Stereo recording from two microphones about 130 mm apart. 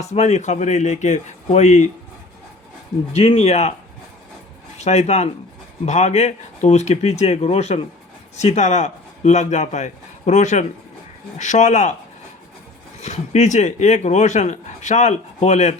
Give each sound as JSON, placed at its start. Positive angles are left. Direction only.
{"t": 0.0, "sound": "speech", "side_deg": 60}
{"t": 3.1, "sound": "speech", "side_deg": 55}
{"t": 4.8, "sound": "a man's voice", "side_deg": 60}
{"t": 13.0, "sound": "speech", "side_deg": 60}